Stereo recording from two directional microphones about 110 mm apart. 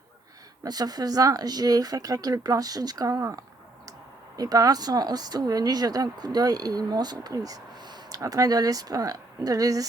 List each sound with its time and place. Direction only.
0.6 s speech: 35° right (ahead or behind)